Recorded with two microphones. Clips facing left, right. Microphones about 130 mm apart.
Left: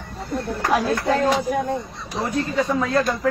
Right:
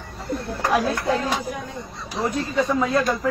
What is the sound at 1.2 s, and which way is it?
Speech, 60° left (ahead or behind).